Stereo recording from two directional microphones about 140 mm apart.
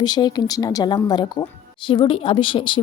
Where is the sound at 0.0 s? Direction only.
30° left (ahead or behind).